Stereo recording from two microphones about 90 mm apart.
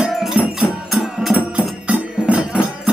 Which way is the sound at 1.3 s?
15° right (ahead or behind).